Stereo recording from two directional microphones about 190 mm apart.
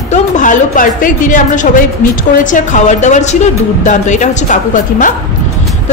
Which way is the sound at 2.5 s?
40° left (ahead or behind).